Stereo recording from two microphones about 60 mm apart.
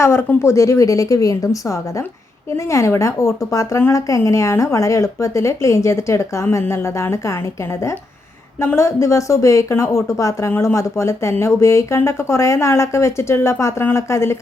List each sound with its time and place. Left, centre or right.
0.0 s speech: left
6.4 s speech: left
8.6 s speech: left